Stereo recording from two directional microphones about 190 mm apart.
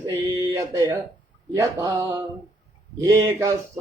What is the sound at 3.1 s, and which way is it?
Speech, 15° right (ahead or behind).